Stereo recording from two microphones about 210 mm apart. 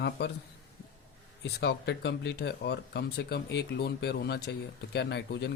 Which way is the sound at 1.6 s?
55° left (ahead or behind).